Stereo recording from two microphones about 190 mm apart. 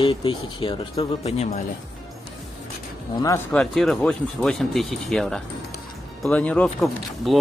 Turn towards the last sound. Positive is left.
turn(degrees=5)  # may be behind; listen again after turning